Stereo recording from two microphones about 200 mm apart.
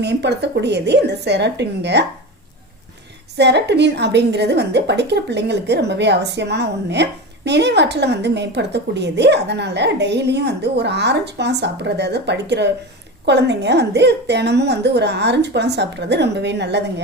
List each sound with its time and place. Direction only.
0.0 s a woman's voice: 60° right (ahead or behind)
3.3 s a woman's voice: 60° right (ahead or behind)